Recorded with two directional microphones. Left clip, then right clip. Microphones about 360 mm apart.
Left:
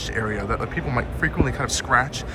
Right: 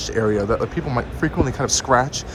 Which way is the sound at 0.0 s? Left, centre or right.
Centre.